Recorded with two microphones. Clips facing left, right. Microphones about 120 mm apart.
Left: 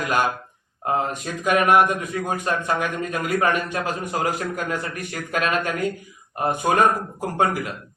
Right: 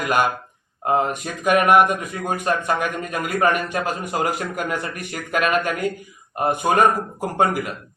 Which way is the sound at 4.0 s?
5° right (ahead or behind).